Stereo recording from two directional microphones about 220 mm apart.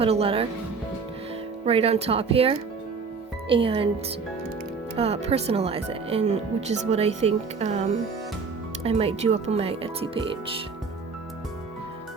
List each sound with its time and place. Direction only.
0.0 s speech: 25° right (ahead or behind)
1.6 s speech: 25° right (ahead or behind)
4.9 s speech: 30° right (ahead or behind)